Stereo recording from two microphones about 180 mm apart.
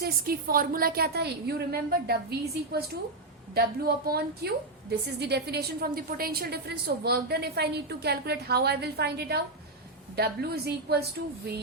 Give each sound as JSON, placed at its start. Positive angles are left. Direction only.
{"t": 0.0, "sound": "a woman's voice", "side_deg": -55}